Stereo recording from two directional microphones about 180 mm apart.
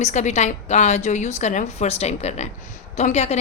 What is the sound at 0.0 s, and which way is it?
A woman's voice, 40° left (ahead or behind).